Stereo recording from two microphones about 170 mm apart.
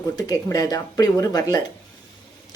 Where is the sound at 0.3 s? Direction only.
20° left (ahead or behind).